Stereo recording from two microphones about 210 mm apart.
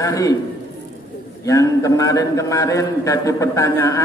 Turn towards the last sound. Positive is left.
turn(degrees=15)  # may be behind; listen again after turning